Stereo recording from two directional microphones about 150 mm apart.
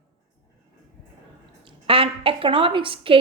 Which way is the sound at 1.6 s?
35° right (ahead or behind).